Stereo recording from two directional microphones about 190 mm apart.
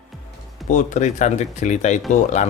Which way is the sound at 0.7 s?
40° left (ahead or behind).